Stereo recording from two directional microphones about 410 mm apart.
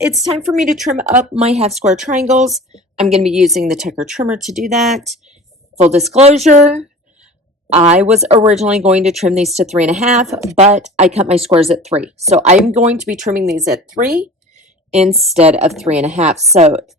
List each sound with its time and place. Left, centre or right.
0.2 s speech: centre
2.4 s speech: centre
3.1 s speech: centre
3.3 s speech: centre
5.7 s speech: centre
10.2 s speech: centre
10.6 s speech: centre
13.4 s speech: centre
14.0 s speech: centre
15.0 s speech: centre
15.3 s speech: centre